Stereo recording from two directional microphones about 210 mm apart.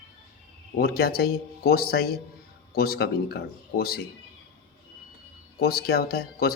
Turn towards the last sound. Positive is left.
turn(degrees=45)  # may be behind; listen again after turning